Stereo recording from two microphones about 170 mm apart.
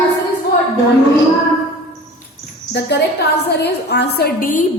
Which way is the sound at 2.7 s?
80° left.